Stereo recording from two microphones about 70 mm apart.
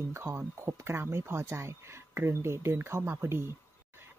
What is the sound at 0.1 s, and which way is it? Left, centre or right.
Speech, right.